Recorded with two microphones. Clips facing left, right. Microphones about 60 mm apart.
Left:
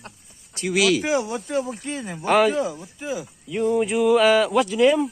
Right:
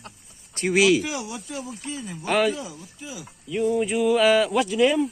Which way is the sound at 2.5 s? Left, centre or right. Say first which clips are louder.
Left 10 dB; left.